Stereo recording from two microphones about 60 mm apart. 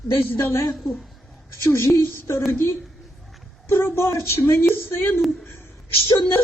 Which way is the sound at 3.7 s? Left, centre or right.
Left.